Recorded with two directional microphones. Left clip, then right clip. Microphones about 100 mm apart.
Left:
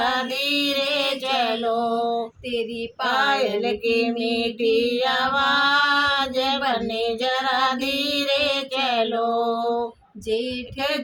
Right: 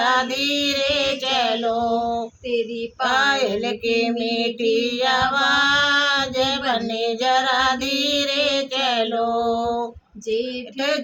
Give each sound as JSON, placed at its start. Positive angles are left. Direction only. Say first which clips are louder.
{"t": 0.0, "sound": "female singing", "louder": "right 3 dB", "side_deg": -25}
{"t": 2.5, "sound": "female singing", "louder": "right 5 dB", "side_deg": 45}
{"t": 3.1, "sound": "female singing", "louder": "right 1 dB", "side_deg": -20}